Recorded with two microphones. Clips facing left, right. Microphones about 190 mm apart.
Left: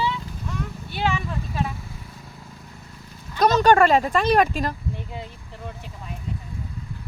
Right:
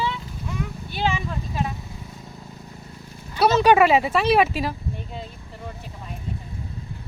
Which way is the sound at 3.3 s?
5° right (ahead or behind).